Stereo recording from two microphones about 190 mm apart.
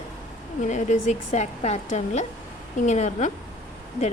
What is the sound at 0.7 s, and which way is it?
A woman's voice, 40° left (ahead or behind).